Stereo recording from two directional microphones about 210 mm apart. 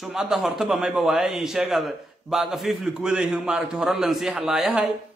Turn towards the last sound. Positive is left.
turn(degrees=0)  # may be behind; listen again after turning